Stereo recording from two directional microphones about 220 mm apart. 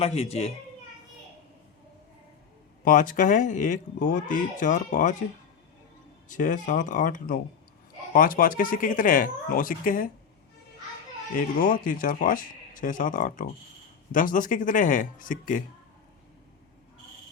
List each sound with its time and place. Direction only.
0.0 s speech: 25° left (ahead or behind)
2.8 s speech: 40° left (ahead or behind)
6.2 s speech: 35° left (ahead or behind)
11.3 s speech: 40° left (ahead or behind)